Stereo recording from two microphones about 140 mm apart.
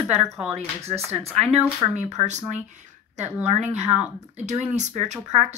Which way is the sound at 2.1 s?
55° right (ahead or behind).